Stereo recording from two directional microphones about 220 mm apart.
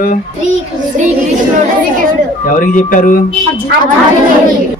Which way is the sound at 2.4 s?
35° left (ahead or behind).